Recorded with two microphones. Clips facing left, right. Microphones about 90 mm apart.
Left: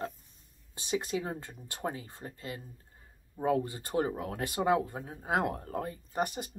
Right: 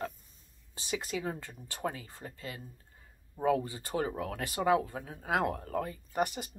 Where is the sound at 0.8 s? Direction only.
30° left (ahead or behind).